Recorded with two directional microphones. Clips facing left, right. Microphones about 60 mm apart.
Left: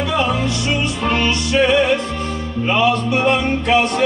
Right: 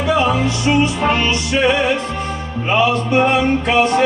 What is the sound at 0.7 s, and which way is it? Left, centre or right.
Music, right.